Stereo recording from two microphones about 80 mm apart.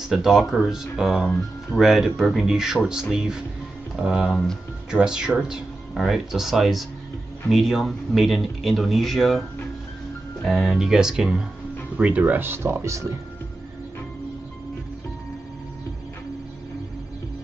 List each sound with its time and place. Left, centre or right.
0.0 s speech: centre
4.3 s speech: centre
4.9 s speech: centre
10.4 s speech: centre; by 13.1 s right